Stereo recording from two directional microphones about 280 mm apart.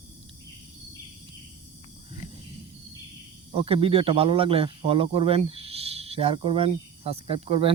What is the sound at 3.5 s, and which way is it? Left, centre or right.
Speech, centre.